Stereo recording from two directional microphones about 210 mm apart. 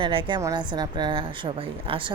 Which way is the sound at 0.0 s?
25° right (ahead or behind).